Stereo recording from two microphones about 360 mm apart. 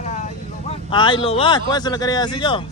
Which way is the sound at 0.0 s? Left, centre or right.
Centre.